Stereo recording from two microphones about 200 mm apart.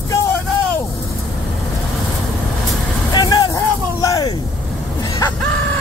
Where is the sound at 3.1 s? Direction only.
20° left (ahead or behind).